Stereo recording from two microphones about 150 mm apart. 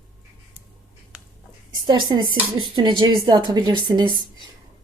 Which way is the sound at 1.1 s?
10° right (ahead or behind).